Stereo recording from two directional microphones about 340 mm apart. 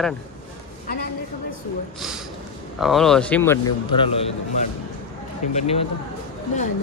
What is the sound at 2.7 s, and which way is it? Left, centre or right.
A man's voice, centre.